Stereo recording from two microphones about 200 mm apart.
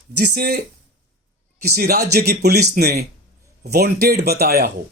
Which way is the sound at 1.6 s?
50° right (ahead or behind).